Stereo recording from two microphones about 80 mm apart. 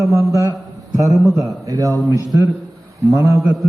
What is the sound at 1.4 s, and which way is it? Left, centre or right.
A man's voice, right.